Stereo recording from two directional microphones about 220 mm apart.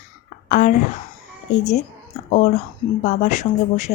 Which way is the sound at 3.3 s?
30° left (ahead or behind).